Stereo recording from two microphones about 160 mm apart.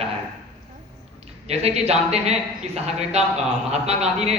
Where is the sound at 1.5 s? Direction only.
40° right (ahead or behind).